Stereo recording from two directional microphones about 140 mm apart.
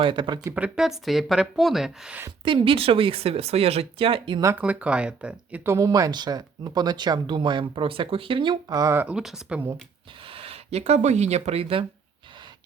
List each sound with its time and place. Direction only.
0.0 s speech: 35° right (ahead or behind)
0.4 s speech: 10° right (ahead or behind)
2.4 s speech: 40° right (ahead or behind)
4.4 s speech: 15° right (ahead or behind)
5.7 s speech: 25° right (ahead or behind)
9.0 s speech: 5° right (ahead or behind)
10.2 s speech: 45° right (ahead or behind)